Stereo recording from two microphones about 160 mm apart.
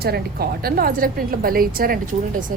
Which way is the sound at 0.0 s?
75° right (ahead or behind).